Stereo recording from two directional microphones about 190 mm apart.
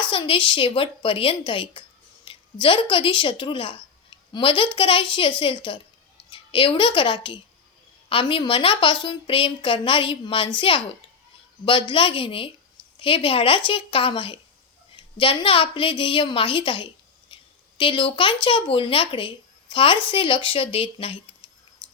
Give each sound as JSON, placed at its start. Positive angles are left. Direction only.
{"t": 0.1, "sound": "a woman's voice", "side_deg": 25}